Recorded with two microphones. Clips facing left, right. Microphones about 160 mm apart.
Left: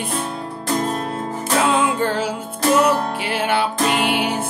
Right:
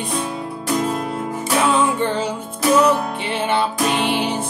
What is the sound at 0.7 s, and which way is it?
Music, 30° left (ahead or behind).